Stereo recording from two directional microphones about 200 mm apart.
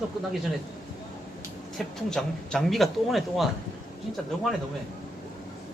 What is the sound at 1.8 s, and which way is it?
Speech, centre (ahead or behind).